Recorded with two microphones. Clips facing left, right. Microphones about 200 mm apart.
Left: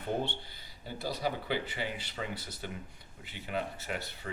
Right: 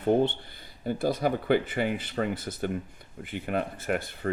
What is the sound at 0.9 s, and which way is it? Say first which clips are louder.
Speech: right 9 dB; 50° right (ahead or behind).